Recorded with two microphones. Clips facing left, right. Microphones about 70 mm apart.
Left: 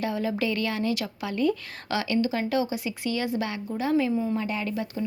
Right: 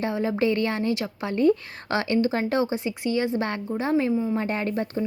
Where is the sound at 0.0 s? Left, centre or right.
Right.